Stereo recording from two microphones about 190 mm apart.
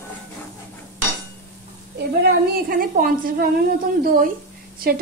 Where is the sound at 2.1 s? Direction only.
55° right (ahead or behind).